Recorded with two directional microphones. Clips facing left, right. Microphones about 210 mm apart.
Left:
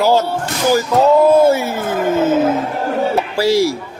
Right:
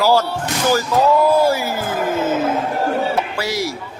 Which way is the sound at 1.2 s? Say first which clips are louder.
Left 4 dB; 25° left (ahead or behind).